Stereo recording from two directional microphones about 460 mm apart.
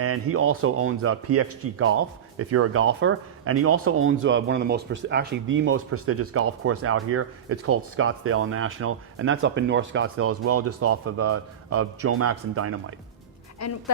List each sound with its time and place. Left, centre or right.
0.0 s speech: right
13.6 s speech: left